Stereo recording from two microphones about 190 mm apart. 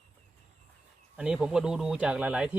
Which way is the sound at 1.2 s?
5° right (ahead or behind).